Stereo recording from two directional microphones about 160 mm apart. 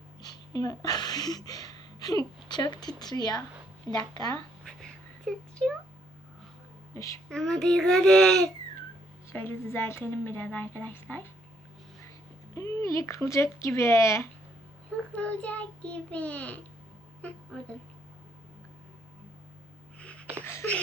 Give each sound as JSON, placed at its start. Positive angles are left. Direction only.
{"t": 0.2, "sound": "speech", "side_deg": 25}
{"t": 4.8, "sound": "a sound", "side_deg": 5}
{"t": 6.9, "sound": "speech", "side_deg": 20}
{"t": 7.3, "sound": "a child's voice", "side_deg": 5}
{"t": 12.5, "sound": "a woman's voice", "side_deg": 20}
{"t": 20.0, "sound": "a sound", "side_deg": 5}